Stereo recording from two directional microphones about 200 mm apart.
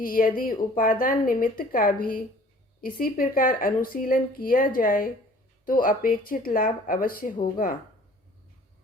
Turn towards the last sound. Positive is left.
turn(degrees=45)  # may be behind; listen again after turning